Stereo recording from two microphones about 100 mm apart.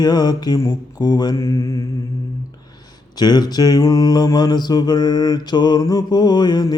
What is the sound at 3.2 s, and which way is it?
Mantra, 45° left (ahead or behind).